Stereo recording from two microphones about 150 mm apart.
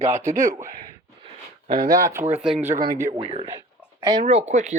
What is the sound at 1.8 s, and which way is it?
Speech, 65° right (ahead or behind).